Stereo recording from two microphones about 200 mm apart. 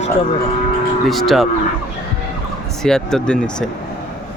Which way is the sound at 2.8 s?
5° left (ahead or behind).